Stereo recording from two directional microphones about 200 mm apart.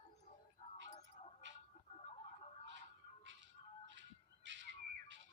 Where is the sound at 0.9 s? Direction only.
30° left (ahead or behind).